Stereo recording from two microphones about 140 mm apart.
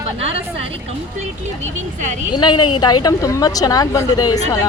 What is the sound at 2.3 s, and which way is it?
A woman's voice, 30° left (ahead or behind).